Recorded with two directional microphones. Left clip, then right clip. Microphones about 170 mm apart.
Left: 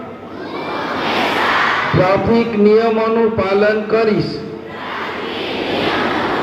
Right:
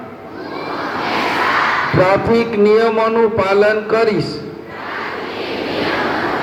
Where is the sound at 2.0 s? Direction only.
45° right (ahead or behind).